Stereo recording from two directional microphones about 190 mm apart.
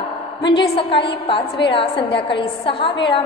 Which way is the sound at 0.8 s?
25° left (ahead or behind).